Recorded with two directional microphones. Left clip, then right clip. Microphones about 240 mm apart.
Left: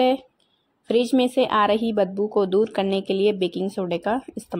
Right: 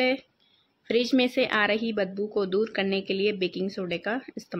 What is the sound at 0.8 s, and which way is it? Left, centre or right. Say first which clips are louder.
Speech: left 4 dB; centre.